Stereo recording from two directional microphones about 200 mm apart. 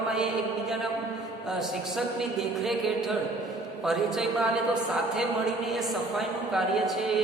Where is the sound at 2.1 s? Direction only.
Centre (ahead or behind).